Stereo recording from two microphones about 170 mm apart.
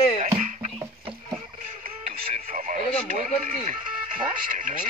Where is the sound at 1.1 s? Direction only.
30° right (ahead or behind).